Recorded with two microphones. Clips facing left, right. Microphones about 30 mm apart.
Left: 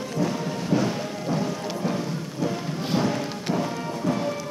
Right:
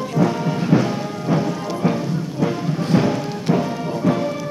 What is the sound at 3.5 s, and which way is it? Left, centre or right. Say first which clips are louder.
Music: right 5 dB; right.